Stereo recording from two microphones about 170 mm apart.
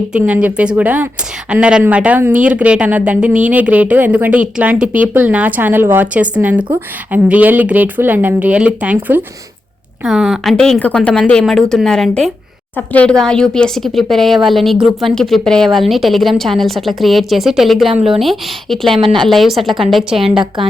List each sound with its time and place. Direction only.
0.1 s a woman's voice: 5° right (ahead or behind)
18.9 s speech: 30° right (ahead or behind)
19.3 s speech: centre (ahead or behind)